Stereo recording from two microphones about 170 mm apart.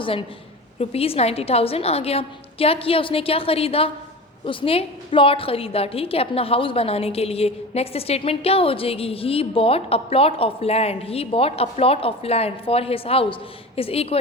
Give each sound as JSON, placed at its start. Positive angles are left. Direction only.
{"t": 0.0, "sound": "a woman's voice", "side_deg": 30}